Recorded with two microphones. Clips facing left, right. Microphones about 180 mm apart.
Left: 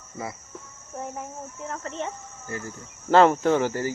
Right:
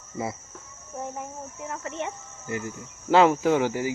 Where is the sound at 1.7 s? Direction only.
15° right (ahead or behind).